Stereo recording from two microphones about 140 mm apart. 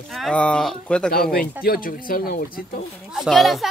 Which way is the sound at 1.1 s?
90° left.